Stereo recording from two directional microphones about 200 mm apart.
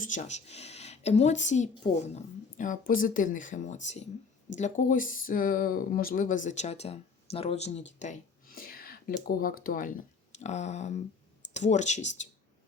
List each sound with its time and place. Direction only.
0.0 s a woman's voice: 40° left (ahead or behind)
10.3 s speech: 35° left (ahead or behind)